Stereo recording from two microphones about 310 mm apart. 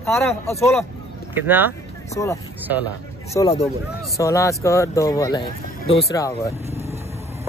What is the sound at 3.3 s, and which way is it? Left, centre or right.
Speech, centre.